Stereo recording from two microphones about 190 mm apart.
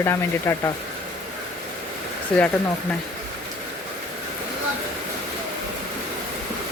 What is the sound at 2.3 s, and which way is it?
Speech, 5° left (ahead or behind).